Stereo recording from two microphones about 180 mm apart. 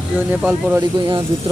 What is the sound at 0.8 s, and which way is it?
Speech, 25° right (ahead or behind).